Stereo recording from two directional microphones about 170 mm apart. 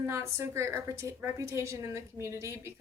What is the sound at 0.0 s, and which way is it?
A woman's voice, 15° right (ahead or behind).